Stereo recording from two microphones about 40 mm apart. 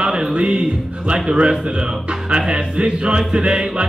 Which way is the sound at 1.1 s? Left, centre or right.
Right.